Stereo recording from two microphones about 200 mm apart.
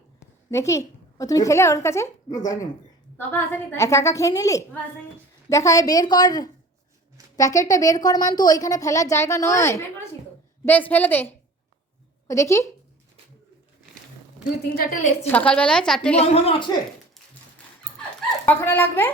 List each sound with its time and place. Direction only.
0.2 s a sound: 15° left (ahead or behind)
1.2 s a woman's voice: 15° left (ahead or behind)
12.3 s a woman's voice: 15° left (ahead or behind)
14.8 s a woman's voice: 45° left (ahead or behind)
15.3 s a woman's voice: 5° left (ahead or behind)
16.2 s a woman's voice: 30° left (ahead or behind)
18.4 s a woman's voice: 10° left (ahead or behind)